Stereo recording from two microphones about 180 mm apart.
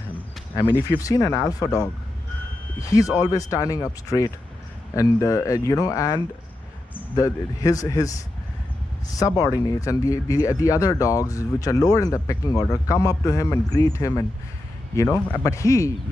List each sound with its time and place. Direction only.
0.6 s speech: 20° left (ahead or behind)
9.1 s speech: 20° left (ahead or behind)